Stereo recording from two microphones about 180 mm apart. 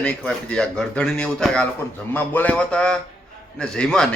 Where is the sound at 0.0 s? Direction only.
5° left (ahead or behind).